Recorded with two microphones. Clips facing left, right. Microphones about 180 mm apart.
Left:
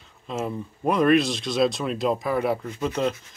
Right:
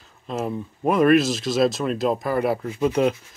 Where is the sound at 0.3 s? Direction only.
Centre (ahead or behind).